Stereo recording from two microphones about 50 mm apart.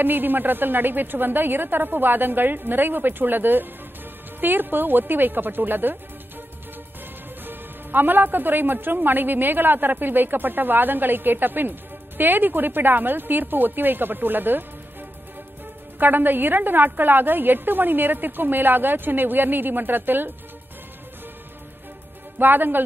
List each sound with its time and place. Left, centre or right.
0.0 s a woman's voice: right
7.4 s a woman's voice: right
16.0 s a woman's voice: right
22.4 s a woman's voice: right